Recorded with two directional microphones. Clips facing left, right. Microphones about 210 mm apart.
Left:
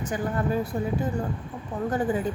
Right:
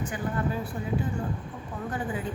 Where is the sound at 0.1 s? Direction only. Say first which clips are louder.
Left 7 dB; 40° left (ahead or behind).